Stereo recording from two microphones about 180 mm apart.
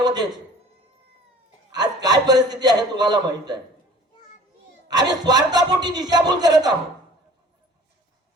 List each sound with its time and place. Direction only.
0.0 s a sound: 25° right (ahead or behind)
1.7 s a man's voice: 20° right (ahead or behind)
5.2 s a man's voice: 20° right (ahead or behind)